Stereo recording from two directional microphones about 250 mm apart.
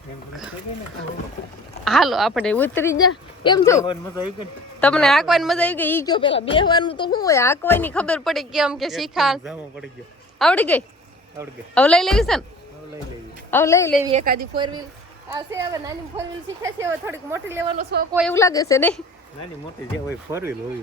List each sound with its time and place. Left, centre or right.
1.8 s a woman's voice: centre
6.1 s a woman's voice: left; by 12.5 s centre
13.5 s a woman's voice: centre
14.1 s speech: right
14.5 s a woman's voice: centre
18.3 s a woman's voice: centre
20.3 s a woman's voice: centre